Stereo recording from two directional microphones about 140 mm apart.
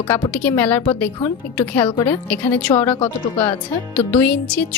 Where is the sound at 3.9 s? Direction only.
10° left (ahead or behind).